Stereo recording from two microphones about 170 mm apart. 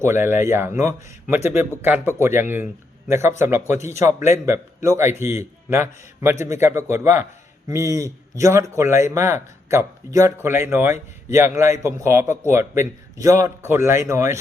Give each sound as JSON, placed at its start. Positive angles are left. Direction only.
{"t": 0.0, "sound": "speech", "side_deg": -15}